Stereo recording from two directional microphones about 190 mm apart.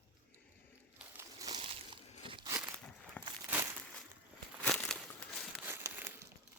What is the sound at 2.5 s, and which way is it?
Crumpling, 10° right (ahead or behind).